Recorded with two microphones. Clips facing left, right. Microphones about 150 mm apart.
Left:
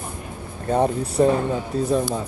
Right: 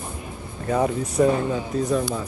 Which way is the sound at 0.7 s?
30° left (ahead or behind).